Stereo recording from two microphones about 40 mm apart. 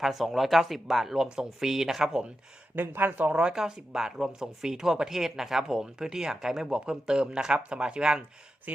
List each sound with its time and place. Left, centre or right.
0.0 s speech: centre
2.7 s speech: right
3.2 s speech: right
3.5 s speech: centre